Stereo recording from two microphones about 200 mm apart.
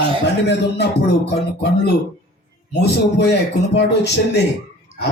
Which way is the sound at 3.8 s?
55° left (ahead or behind).